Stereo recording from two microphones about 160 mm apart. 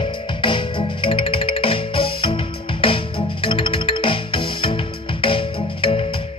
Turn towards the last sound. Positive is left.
turn(degrees=35)  # may be behind; listen again after turning